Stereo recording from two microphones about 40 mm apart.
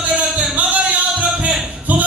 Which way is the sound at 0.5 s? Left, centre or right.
Right.